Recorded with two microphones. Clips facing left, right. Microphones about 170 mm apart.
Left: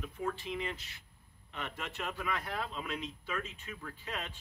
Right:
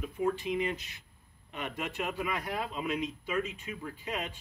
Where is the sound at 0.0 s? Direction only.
15° right (ahead or behind).